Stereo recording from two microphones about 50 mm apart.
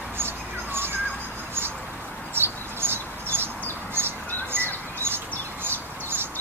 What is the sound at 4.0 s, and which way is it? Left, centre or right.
Bird, right.